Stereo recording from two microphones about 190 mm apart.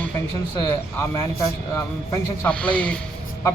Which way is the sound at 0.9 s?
15° left (ahead or behind).